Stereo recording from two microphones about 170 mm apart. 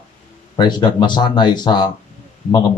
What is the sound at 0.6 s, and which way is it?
Speech, 25° left (ahead or behind).